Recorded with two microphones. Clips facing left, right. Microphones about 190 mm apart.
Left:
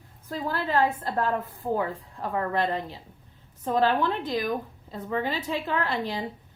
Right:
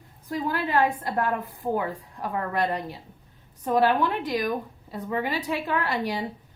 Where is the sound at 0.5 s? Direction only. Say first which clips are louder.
Even; 15° right (ahead or behind).